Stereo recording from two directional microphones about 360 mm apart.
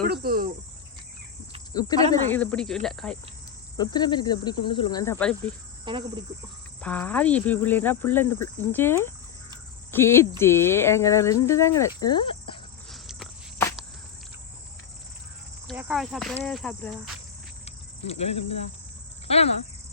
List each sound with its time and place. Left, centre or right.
0.0 s speech: right
1.7 s speech: centre
3.8 s speech: centre
5.8 s cricket: centre
6.8 s speech: centre
12.9 s walk: centre
15.6 s speech: centre
17.7 s cricket: centre